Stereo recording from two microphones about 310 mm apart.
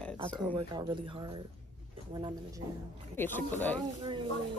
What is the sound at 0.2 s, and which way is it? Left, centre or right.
Speech, centre.